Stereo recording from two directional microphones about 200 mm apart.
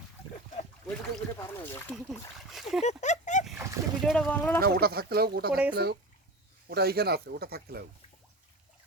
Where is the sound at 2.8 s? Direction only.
35° left (ahead or behind).